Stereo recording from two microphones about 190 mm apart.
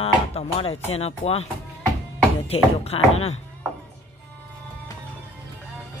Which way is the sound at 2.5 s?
30° left (ahead or behind).